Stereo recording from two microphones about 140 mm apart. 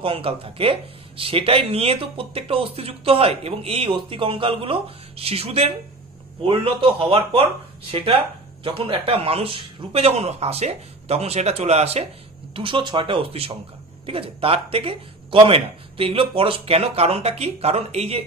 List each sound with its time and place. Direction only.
0.0 s a man's voice: 40° right (ahead or behind)
12.5 s a man's voice: 35° right (ahead or behind)